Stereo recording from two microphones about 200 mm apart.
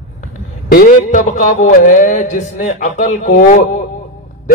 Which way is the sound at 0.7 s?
45° left (ahead or behind).